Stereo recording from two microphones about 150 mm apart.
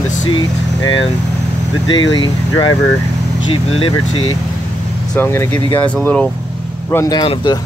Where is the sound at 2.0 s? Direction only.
30° left (ahead or behind).